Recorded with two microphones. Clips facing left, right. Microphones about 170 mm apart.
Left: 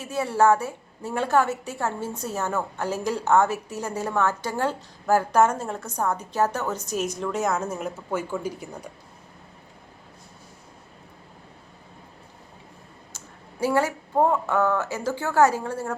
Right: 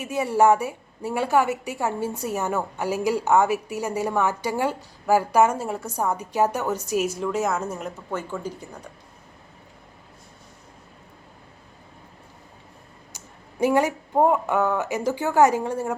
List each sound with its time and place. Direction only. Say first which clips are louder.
0.0 s a woman's voice: right 2 dB; 15° right (ahead or behind); by 8.9 s 10° left (ahead or behind)
13.1 s speech: right 5 dB; 20° right (ahead or behind)